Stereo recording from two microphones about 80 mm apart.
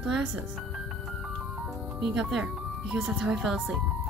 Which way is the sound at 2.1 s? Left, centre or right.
Centre.